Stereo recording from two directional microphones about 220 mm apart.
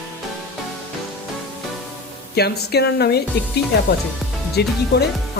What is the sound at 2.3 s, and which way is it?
Music, 45° left (ahead or behind).